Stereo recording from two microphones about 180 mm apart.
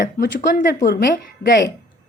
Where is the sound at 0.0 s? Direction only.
50° left (ahead or behind).